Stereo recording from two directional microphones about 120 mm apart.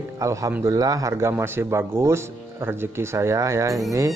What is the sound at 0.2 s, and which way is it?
Speech, 25° right (ahead or behind).